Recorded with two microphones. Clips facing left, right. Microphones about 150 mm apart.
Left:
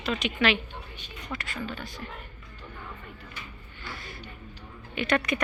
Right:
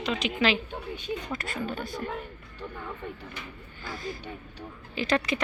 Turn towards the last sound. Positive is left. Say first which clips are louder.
# even
turn(degrees=-30)  # may be behind; listen again after turning